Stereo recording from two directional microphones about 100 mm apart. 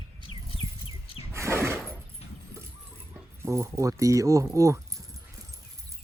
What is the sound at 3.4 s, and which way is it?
Speech, 30° right (ahead or behind).